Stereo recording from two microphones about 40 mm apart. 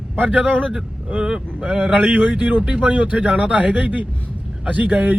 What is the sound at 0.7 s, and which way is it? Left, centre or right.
Speech, right.